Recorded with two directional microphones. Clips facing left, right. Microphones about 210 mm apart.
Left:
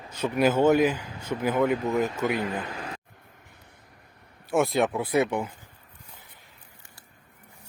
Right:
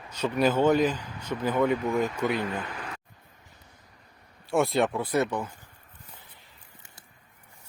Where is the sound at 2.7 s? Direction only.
35° left (ahead or behind).